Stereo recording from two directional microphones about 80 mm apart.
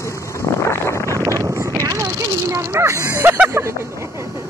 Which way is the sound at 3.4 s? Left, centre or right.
Right.